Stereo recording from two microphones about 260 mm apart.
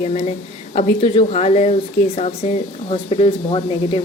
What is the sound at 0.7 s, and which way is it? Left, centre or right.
A woman's voice, left.